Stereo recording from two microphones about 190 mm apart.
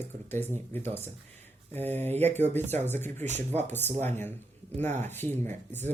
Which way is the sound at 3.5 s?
10° left (ahead or behind).